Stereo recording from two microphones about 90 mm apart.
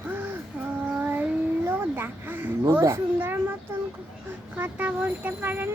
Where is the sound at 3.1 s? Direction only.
25° right (ahead or behind).